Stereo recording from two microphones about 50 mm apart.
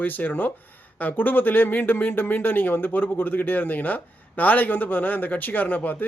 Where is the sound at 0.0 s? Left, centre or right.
Left.